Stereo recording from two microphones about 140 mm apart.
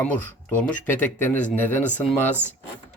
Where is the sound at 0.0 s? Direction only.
10° left (ahead or behind).